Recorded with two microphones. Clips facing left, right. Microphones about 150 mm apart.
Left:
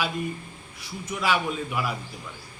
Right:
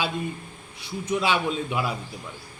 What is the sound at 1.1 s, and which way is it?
Speech, 25° right (ahead or behind).